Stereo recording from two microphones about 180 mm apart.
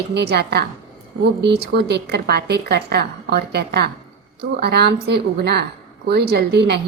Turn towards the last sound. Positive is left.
turn(degrees=-65)  # may be behind; listen again after turning